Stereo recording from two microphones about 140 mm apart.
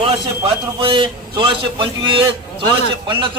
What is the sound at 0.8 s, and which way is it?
A man's voice, 40° right (ahead or behind).